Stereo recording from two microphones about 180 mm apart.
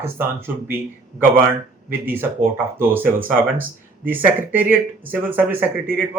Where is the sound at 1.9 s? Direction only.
10° right (ahead or behind).